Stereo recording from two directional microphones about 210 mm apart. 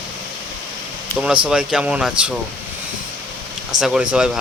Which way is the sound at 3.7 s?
Centre (ahead or behind).